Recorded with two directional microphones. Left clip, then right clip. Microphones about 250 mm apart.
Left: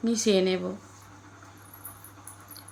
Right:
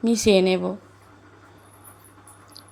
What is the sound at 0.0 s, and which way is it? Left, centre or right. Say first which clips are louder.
Speech: right 6 dB; right.